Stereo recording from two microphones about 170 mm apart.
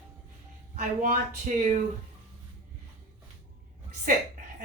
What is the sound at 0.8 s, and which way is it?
Speech, 50° right (ahead or behind).